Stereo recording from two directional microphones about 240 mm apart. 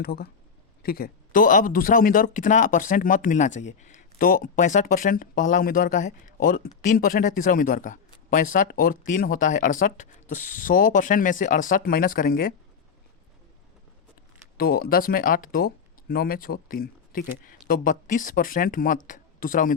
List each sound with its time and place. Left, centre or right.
0.0 s speech: left
14.6 s speech: left